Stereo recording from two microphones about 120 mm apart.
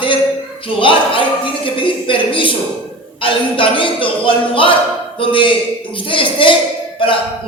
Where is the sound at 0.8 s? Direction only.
45° left (ahead or behind).